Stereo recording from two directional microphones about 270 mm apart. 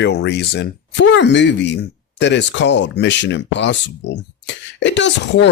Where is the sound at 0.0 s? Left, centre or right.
Left.